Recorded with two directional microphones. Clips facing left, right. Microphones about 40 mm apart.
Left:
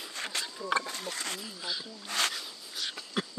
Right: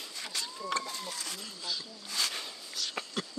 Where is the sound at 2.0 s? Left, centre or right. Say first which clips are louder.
Left 4 dB; left.